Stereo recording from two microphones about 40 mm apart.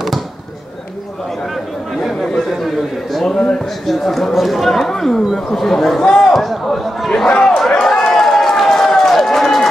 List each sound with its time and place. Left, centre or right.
2.3 s chatter: centre
3.3 s speech: centre
3.8 s speech: centre
6.3 s a sound: centre
7.4 s run: centre